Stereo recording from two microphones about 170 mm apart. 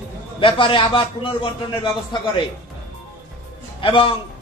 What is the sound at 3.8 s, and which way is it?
Speech, 30° left (ahead or behind).